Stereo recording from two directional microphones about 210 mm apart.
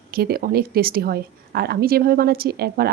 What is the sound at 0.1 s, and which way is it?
Speech, 45° right (ahead or behind).